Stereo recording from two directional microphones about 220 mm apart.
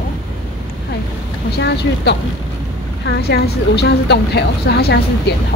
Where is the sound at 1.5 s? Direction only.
50° left (ahead or behind).